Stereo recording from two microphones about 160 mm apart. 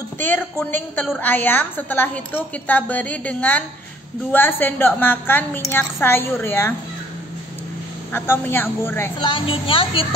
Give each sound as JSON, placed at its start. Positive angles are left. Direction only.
{"t": 0.2, "sound": "a woman's voice", "side_deg": 10}
{"t": 8.1, "sound": "a woman's voice", "side_deg": 15}
{"t": 9.2, "sound": "speech", "side_deg": 35}